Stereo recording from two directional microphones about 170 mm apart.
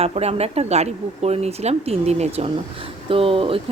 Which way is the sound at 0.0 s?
40° right (ahead or behind).